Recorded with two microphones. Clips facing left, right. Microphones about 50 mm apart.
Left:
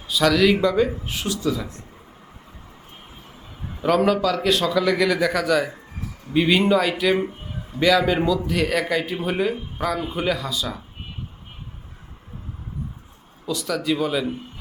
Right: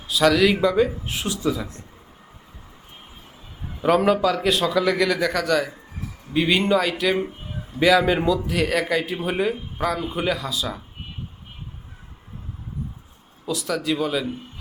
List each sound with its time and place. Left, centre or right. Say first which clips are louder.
0.1 s a man's voice: even; centre
1.3 s speech: even; centre
3.8 s a man's voice: right 1 dB; centre
7.8 s a man's voice: right 1 dB; centre
13.4 s a man's voice: even; centre